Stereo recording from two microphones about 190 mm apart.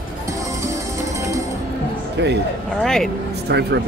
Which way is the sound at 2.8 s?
Centre (ahead or behind).